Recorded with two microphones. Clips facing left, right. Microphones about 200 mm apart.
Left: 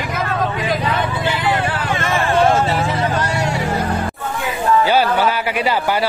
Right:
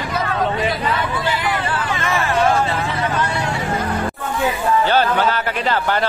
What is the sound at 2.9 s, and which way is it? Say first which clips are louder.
Vehicle: left 2 dB; 40° left (ahead or behind).